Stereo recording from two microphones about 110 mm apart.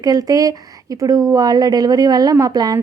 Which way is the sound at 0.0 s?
35° right (ahead or behind).